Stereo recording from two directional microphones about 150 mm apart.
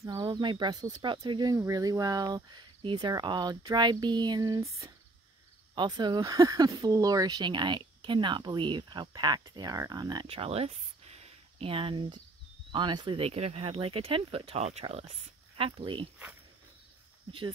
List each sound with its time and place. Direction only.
0.0 s speech: 25° right (ahead or behind)